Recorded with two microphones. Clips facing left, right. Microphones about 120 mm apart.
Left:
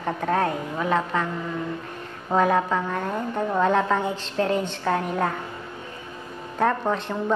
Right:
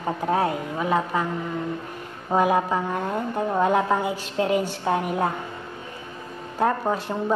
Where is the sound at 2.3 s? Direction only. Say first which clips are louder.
Even; 15° right (ahead or behind).